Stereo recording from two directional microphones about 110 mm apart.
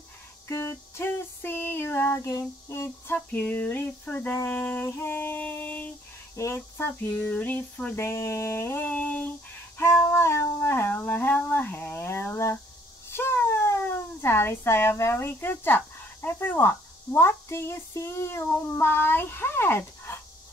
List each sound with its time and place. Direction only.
0.5 s a sound: 25° left (ahead or behind)
3.2 s music: 15° left (ahead or behind)
6.3 s speech: 25° left (ahead or behind)